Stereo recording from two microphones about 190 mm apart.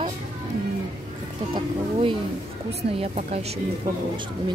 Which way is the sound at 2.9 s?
35° right (ahead or behind).